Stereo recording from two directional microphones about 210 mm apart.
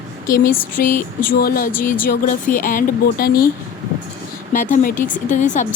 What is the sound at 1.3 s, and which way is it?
Speech, 45° left (ahead or behind).